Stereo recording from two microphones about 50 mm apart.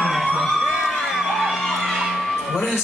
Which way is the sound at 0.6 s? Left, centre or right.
Centre.